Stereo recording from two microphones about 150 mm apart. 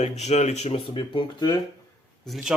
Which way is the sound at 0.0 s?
45° left (ahead or behind).